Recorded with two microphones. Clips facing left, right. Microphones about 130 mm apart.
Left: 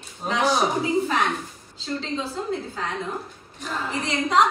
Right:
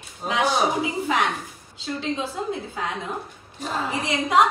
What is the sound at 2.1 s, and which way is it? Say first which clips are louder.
Speech: left 1 dB; 15° right (ahead or behind).